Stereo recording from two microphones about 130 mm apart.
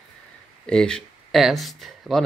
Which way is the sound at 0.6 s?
5° left (ahead or behind).